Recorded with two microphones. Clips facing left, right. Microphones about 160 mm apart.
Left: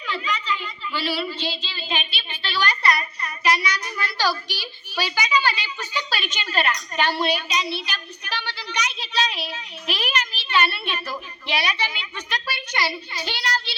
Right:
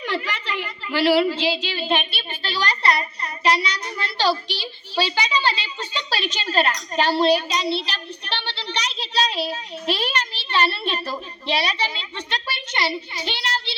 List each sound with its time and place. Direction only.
0.2 s a woman's voice: 70° right (ahead or behind); by 13.7 s 25° right (ahead or behind)